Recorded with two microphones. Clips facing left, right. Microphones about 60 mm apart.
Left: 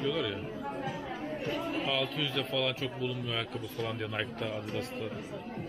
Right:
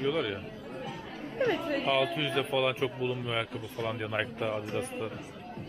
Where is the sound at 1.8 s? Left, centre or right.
Centre.